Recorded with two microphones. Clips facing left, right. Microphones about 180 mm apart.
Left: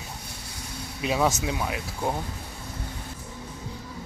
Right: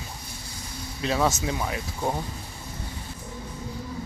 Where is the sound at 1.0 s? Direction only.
10° left (ahead or behind).